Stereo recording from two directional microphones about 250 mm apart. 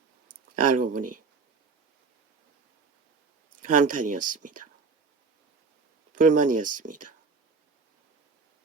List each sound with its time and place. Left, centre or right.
0.5 s speech: right
3.5 s speech: right
6.1 s speech: right